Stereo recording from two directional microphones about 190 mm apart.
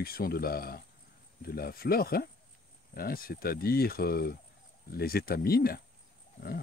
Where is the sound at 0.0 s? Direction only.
50° left (ahead or behind).